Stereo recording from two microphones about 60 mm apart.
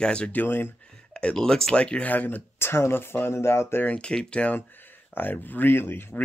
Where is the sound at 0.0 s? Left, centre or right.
Centre.